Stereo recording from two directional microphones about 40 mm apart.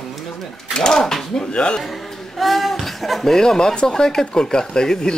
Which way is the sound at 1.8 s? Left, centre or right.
Centre.